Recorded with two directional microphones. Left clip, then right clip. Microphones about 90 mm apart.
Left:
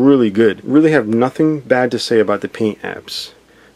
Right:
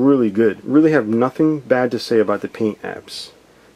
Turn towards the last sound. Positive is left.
turn(degrees=25)  # may be behind; listen again after turning